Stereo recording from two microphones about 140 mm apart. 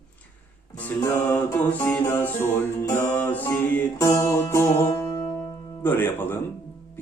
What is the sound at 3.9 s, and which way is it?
Music, 25° left (ahead or behind).